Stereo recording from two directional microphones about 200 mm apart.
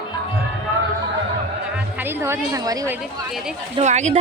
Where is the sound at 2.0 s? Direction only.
10° right (ahead or behind).